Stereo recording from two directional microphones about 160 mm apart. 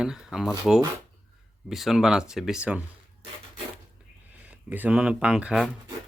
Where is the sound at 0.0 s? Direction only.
5° right (ahead or behind).